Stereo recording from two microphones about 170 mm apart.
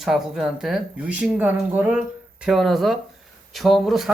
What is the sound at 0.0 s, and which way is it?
Speech, centre (ahead or behind).